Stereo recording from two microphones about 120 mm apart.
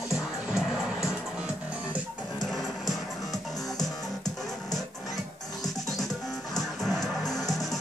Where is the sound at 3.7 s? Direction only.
30° left (ahead or behind).